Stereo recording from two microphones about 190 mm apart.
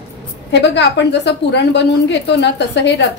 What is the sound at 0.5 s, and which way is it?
A woman's voice, 65° left (ahead or behind).